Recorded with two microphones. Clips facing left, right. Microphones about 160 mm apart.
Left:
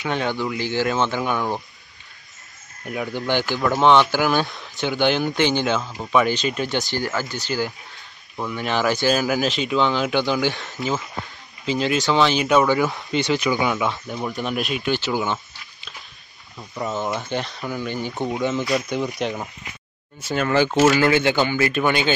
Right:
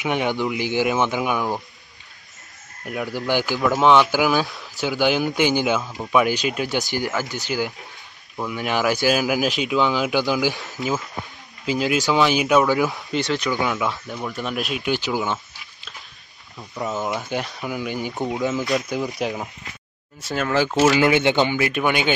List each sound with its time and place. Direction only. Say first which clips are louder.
0.0 s speech: right 2 dB; 15° right (ahead or behind)
2.8 s speech: even; centre (ahead or behind)
20.9 s speech: right 1 dB; 20° right (ahead or behind)